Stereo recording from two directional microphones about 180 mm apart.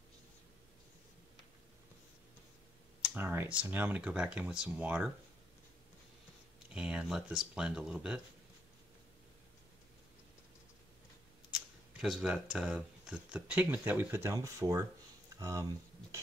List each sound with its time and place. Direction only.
3.2 s speech: 10° right (ahead or behind)
6.7 s speech: 5° right (ahead or behind)
11.5 s speech: centre (ahead or behind)